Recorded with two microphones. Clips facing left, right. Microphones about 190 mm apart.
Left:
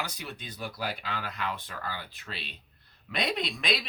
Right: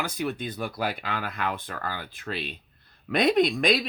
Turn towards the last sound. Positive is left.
turn(degrees=-45)  # may be behind; listen again after turning